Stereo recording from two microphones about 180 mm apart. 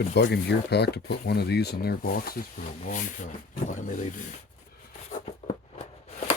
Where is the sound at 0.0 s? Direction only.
65° left (ahead or behind).